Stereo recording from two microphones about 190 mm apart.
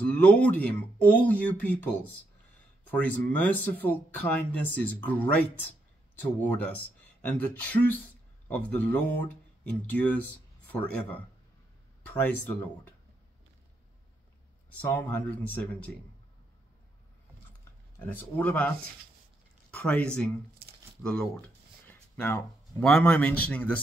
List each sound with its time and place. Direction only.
0.0 s speech: 5° left (ahead or behind)
6.4 s speech: 10° left (ahead or behind)
14.8 s speech: 10° left (ahead or behind)
17.9 s speech: 10° left (ahead or behind)
19.7 s speech: 5° left (ahead or behind)
20.6 s a sound: 50° right (ahead or behind)
21.0 s speech: 5° left (ahead or behind)